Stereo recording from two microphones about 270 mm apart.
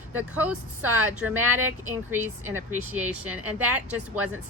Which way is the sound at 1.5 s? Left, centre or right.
Right.